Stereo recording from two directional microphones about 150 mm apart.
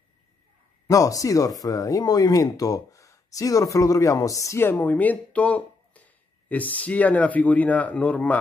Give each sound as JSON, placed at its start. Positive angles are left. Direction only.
{"t": 0.8, "sound": "speech", "side_deg": 20}